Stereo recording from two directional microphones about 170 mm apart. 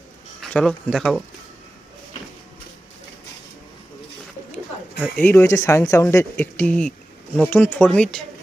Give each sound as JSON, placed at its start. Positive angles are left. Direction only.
{"t": 0.4, "sound": "speech", "side_deg": 5}
{"t": 4.9, "sound": "speech", "side_deg": 0}
{"t": 5.2, "sound": "speech", "side_deg": 10}